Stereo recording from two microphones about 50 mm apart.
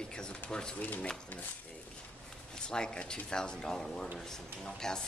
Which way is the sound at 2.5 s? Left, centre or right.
Centre.